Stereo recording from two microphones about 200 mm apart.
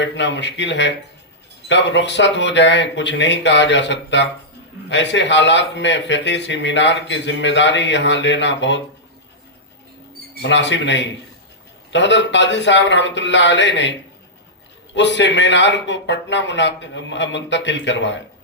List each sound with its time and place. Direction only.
0.0 s a man's voice: 60° left (ahead or behind)
10.4 s a man's voice: 60° left (ahead or behind)
14.9 s a man's voice: 60° left (ahead or behind)